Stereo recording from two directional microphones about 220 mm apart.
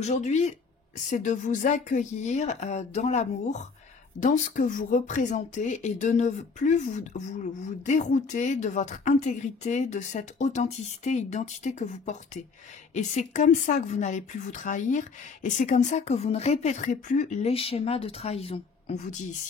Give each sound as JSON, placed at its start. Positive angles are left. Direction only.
{"t": 0.0, "sound": "speech", "side_deg": 30}